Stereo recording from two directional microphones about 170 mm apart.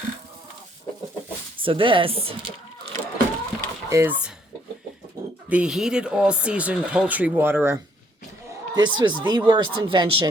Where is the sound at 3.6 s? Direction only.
15° right (ahead or behind).